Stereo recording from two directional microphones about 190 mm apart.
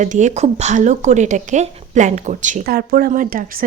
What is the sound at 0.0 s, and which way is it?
A woman's voice, 40° right (ahead or behind).